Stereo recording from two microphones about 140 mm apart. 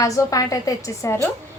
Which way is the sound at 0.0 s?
25° left (ahead or behind).